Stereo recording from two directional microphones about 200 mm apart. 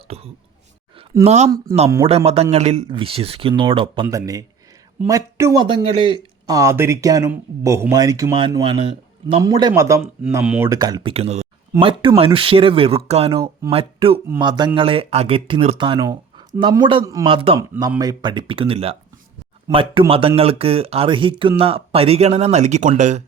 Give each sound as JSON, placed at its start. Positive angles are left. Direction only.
{"t": 0.1, "sound": "speech", "side_deg": -30}
{"t": 10.7, "sound": "speech", "side_deg": -20}